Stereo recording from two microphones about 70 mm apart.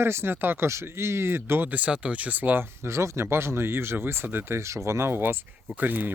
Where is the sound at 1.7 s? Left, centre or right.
Centre.